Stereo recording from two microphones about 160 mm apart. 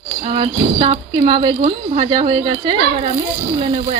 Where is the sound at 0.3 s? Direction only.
40° right (ahead or behind).